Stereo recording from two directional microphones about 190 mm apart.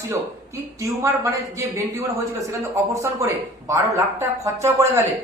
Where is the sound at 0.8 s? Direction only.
15° right (ahead or behind).